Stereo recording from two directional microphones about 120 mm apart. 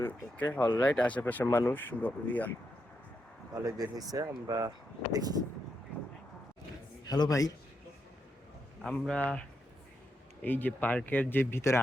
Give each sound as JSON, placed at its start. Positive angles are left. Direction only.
{"t": 0.0, "sound": "speech", "side_deg": 15}
{"t": 3.5, "sound": "speech", "side_deg": -30}
{"t": 7.0, "sound": "speech", "side_deg": 35}
{"t": 8.8, "sound": "speech", "side_deg": 5}
{"t": 10.4, "sound": "speech", "side_deg": 15}